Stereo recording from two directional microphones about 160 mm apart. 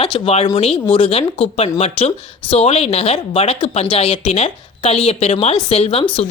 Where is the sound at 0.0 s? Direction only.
35° left (ahead or behind).